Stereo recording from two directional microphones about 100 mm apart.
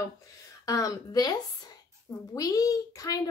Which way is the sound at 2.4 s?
35° left (ahead or behind).